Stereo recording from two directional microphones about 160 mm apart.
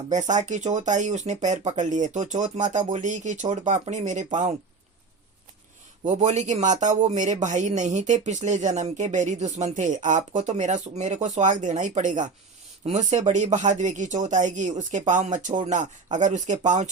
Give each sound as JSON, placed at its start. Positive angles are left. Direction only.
{"t": 0.1, "sound": "speech", "side_deg": -50}
{"t": 6.1, "sound": "speech", "side_deg": -45}